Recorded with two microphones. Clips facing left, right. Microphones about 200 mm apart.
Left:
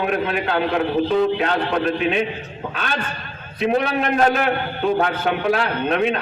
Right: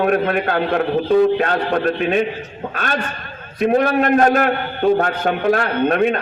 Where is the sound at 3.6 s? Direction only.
50° right (ahead or behind).